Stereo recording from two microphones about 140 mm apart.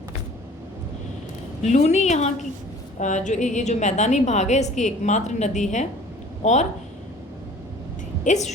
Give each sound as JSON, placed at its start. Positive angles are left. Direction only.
{"t": 1.6, "sound": "a woman's voice", "side_deg": 55}
{"t": 8.2, "sound": "a woman's voice", "side_deg": 55}